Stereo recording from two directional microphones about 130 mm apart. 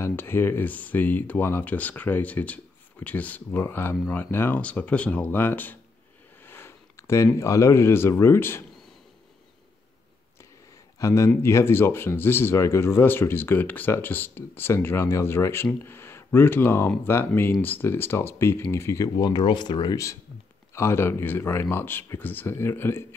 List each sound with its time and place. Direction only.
0.0 s speech: 15° left (ahead or behind)
11.0 s speech: 25° left (ahead or behind)